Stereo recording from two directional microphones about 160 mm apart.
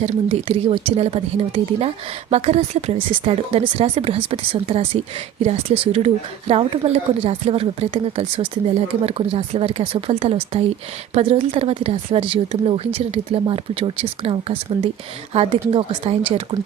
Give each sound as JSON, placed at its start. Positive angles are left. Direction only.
{"t": 0.0, "sound": "speech", "side_deg": -40}